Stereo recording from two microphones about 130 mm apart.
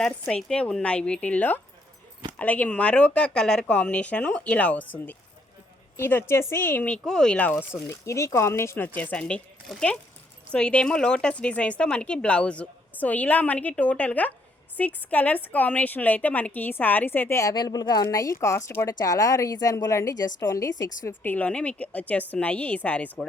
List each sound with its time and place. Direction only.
0.0 s speech: 5° left (ahead or behind)
7.9 s a woman's voice: 25° left (ahead or behind)